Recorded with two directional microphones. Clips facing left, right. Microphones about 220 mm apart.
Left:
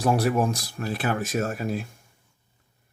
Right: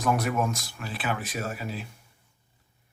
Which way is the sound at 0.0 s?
30° left (ahead or behind).